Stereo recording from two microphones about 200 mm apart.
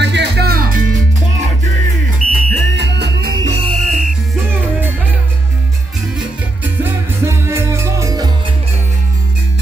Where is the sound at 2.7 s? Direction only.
60° right (ahead or behind).